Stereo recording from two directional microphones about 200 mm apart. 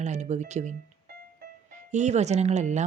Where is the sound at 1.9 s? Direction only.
35° right (ahead or behind).